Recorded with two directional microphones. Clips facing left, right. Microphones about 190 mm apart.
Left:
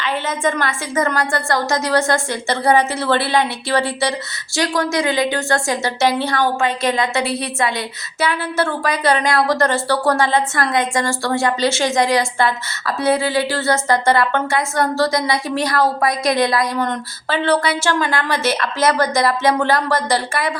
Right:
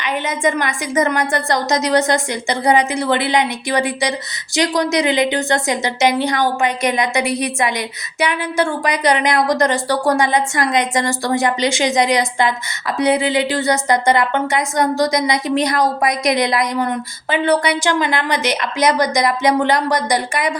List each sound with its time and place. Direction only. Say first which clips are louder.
0.0 s a woman's voice: right 1 dB; 15° right (ahead or behind)
16.7 s a woman's voice: right 1 dB; 10° right (ahead or behind)